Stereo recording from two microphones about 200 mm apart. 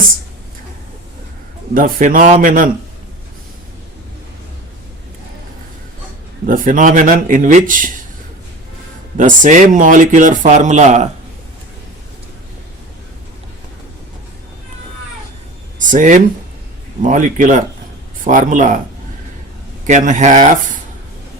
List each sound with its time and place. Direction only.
1.7 s a man's voice: 45° right (ahead or behind)
6.5 s speech: 40° right (ahead or behind)
9.1 s speech: 40° right (ahead or behind)
15.9 s speech: 40° right (ahead or behind)
19.9 s speech: 40° right (ahead or behind)